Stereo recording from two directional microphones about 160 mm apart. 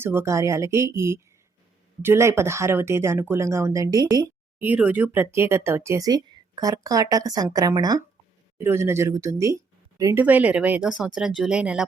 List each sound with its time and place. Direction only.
0.0 s speech: 15° right (ahead or behind)
4.6 s speech: 10° right (ahead or behind)